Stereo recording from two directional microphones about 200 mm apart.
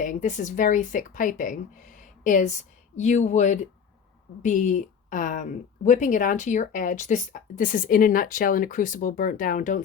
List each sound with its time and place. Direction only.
0.0 s speech: 40° left (ahead or behind)